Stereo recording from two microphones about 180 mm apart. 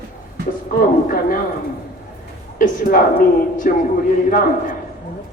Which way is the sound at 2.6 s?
50° left (ahead or behind).